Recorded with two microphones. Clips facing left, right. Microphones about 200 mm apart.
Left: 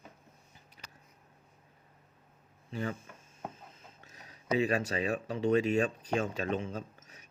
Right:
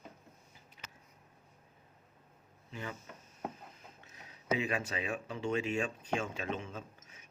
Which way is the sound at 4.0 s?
35° left (ahead or behind).